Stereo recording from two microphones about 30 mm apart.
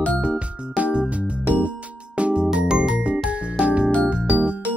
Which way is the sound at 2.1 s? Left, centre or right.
Right.